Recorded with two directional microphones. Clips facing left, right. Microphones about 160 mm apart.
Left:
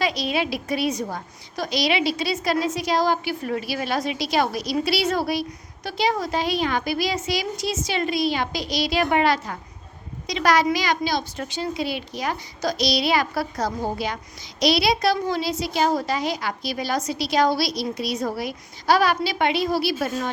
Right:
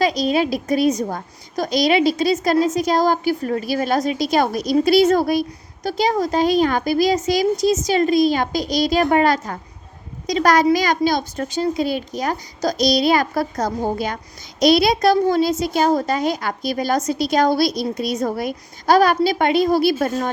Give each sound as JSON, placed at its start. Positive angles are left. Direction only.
{"t": 0.0, "sound": "a woman's voice", "side_deg": -40}